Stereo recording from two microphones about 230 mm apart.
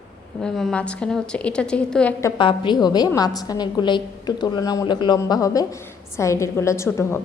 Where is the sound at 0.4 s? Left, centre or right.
Centre.